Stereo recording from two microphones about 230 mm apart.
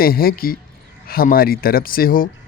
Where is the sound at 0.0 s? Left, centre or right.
Left.